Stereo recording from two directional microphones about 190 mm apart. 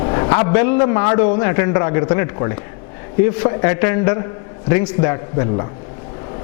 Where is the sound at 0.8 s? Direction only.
15° left (ahead or behind).